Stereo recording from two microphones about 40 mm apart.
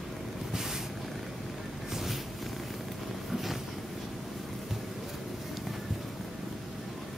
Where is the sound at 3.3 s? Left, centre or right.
Centre.